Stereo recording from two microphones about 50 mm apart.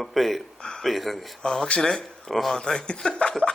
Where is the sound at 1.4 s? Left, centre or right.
Centre.